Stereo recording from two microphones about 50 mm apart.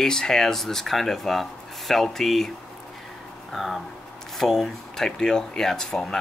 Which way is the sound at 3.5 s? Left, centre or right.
Centre.